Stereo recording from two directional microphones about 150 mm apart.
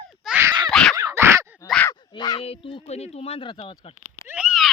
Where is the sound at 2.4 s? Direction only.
40° left (ahead or behind).